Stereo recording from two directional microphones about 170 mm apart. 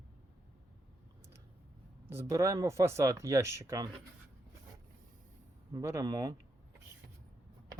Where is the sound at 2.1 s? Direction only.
15° right (ahead or behind).